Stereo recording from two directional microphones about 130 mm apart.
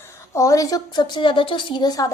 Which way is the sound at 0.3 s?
25° left (ahead or behind).